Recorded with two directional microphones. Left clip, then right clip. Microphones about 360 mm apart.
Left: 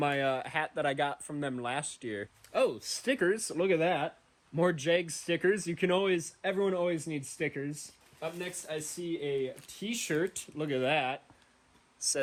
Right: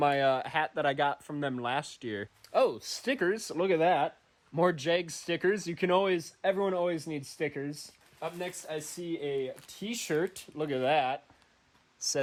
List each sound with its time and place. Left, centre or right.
0.0 s speech: right